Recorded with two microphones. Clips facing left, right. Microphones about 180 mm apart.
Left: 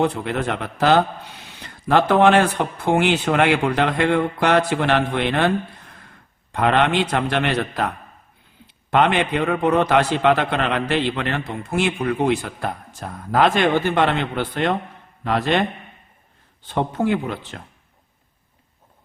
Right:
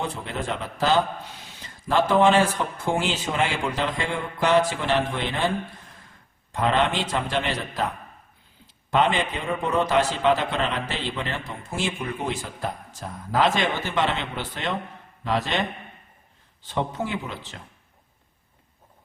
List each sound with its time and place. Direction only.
0.0 s a man's voice: 65° left (ahead or behind)
6.5 s a man's voice: 65° left (ahead or behind)
16.6 s a man's voice: 55° left (ahead or behind)